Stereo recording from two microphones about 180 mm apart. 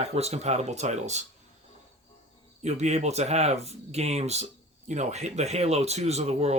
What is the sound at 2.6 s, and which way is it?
Speech, 40° right (ahead or behind).